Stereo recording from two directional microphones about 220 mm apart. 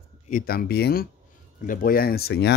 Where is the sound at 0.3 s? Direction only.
40° left (ahead or behind).